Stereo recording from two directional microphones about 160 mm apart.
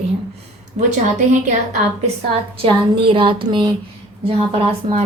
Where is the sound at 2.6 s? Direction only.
35° right (ahead or behind).